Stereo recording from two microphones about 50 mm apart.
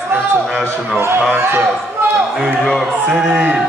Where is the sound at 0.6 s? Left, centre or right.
Right.